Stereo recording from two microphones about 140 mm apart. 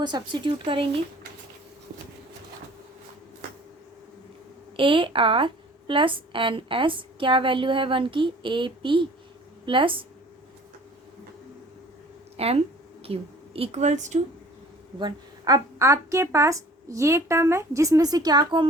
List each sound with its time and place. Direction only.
0.0 s a woman's voice: 30° right (ahead or behind)
4.8 s a woman's voice: 40° right (ahead or behind)
12.4 s a woman's voice: 45° right (ahead or behind)
14.9 s a woman's voice: 30° right (ahead or behind)